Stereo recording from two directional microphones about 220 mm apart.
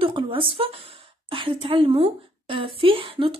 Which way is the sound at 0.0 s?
25° right (ahead or behind).